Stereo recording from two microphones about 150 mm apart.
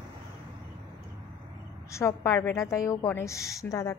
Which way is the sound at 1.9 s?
20° left (ahead or behind).